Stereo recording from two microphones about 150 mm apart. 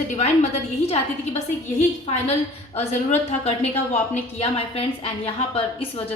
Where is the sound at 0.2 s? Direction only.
45° left (ahead or behind).